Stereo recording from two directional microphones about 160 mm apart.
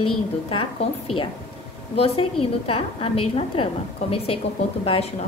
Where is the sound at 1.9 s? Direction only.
40° left (ahead or behind).